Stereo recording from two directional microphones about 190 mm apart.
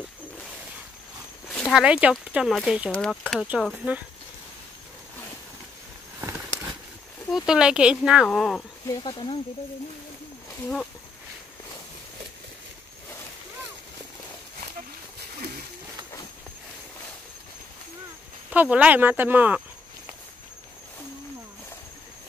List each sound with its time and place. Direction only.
1.5 s speech: centre (ahead or behind)
3.4 s speech: 5° right (ahead or behind)
6.2 s a sound: 10° right (ahead or behind)
7.2 s speech: centre (ahead or behind)
8.8 s speech: 20° left (ahead or behind)
18.5 s speech: 10° right (ahead or behind)